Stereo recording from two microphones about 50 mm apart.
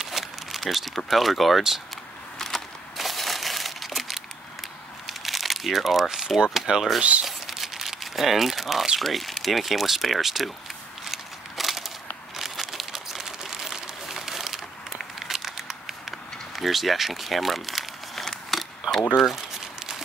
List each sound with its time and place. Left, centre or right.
0.0 s a sound: centre
2.3 s crumpling: centre
5.2 s speech: centre
7.0 s speech: right
7.2 s crumpling: centre
9.0 s speech: centre
11.1 s a sound: centre
12.4 s crumpling: centre
19.1 s speech: centre